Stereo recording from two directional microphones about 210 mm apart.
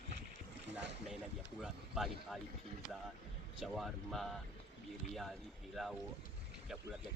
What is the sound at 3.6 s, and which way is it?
Speech, centre (ahead or behind).